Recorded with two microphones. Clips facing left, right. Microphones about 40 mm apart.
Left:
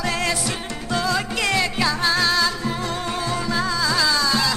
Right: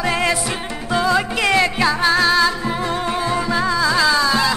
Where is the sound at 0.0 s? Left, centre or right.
Right.